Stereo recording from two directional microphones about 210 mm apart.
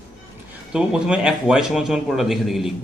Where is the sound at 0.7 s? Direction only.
5° right (ahead or behind).